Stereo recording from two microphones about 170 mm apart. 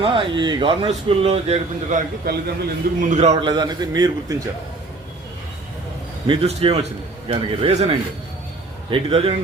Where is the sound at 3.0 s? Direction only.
40° right (ahead or behind).